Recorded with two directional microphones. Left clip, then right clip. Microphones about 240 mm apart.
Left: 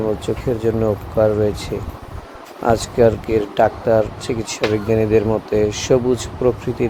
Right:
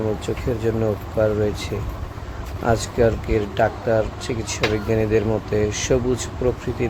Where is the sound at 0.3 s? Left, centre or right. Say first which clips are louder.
Left 4 dB; centre.